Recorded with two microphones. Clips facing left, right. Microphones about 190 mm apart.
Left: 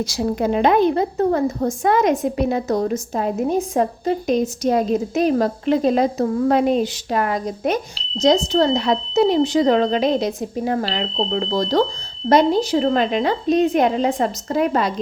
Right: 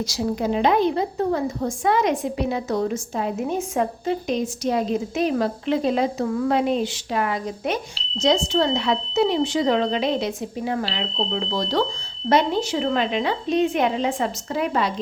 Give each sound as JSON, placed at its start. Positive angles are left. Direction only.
{"t": 0.1, "sound": "a woman's voice", "side_deg": 55}